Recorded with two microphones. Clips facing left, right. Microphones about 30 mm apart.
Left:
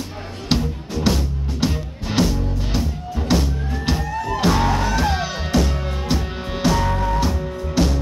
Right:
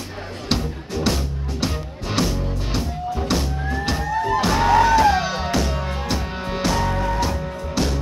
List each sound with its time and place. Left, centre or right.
1.0 s music: centre
4.8 s music: centre
5.1 s music: centre